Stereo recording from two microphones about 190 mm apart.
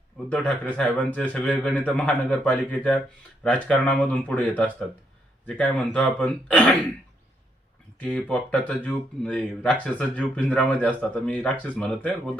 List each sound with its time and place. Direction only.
0.3 s speech: 5° left (ahead or behind)
8.0 s speech: 5° left (ahead or behind)